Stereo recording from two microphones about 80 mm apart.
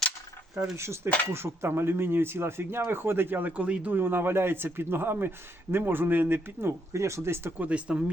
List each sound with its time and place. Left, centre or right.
0.8 s speech: right
7.6 s speech: centre